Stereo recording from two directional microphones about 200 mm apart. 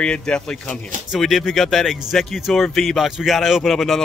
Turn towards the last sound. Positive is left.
turn(degrees=0)  # may be behind; listen again after turning